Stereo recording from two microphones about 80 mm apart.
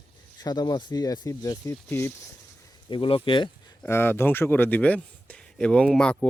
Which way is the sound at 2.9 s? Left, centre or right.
Left.